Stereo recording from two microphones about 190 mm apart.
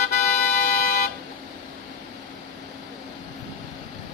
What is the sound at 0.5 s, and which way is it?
Vehicle, 55° left (ahead or behind).